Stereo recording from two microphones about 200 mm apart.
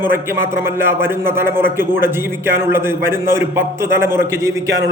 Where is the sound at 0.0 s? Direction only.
10° right (ahead or behind).